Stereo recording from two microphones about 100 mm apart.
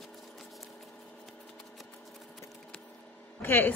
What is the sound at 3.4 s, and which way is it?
Speech, 20° left (ahead or behind).